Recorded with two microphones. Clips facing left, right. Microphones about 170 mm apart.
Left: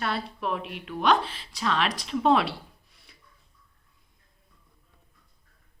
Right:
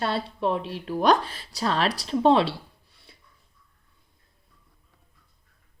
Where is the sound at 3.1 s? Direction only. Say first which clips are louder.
Right 4 dB; 30° right (ahead or behind).